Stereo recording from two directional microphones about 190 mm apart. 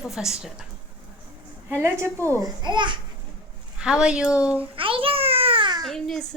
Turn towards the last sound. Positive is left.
turn(degrees=5)  # may be behind; listen again after turning